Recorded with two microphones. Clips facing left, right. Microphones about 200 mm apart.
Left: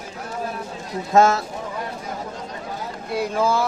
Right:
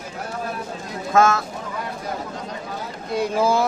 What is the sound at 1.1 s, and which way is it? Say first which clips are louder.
Speech: left 1 dB; 35° left (ahead or behind).